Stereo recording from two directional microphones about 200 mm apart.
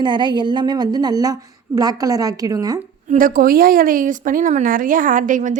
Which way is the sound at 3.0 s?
45° right (ahead or behind).